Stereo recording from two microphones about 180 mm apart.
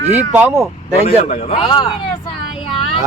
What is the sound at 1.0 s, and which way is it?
Speech, 35° left (ahead or behind).